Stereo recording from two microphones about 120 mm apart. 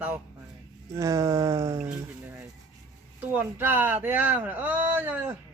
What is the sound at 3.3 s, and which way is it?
Speech, 15° right (ahead or behind).